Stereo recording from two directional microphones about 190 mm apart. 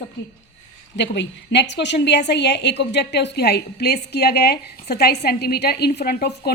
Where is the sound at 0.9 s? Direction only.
65° left (ahead or behind).